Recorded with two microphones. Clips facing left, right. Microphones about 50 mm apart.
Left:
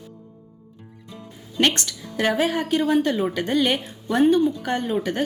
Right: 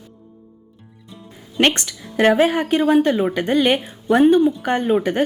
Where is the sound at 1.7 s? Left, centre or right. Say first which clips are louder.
Right 6 dB; right.